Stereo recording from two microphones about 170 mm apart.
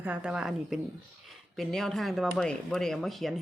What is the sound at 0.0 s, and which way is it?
Speech, 5° right (ahead or behind).